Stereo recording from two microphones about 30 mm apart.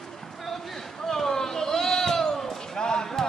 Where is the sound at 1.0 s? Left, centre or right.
Centre.